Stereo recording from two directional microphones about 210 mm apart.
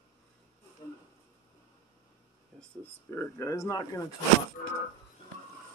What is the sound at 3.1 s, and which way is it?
Speech, 10° left (ahead or behind).